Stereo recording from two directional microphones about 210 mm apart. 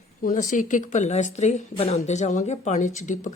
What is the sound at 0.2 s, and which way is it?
Speech, 40° left (ahead or behind).